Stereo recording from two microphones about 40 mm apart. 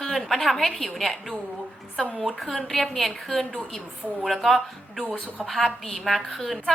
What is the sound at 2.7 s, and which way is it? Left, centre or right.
A woman's voice, centre.